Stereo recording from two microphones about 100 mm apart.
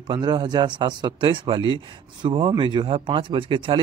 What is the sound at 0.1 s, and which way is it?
Speech, 50° right (ahead or behind).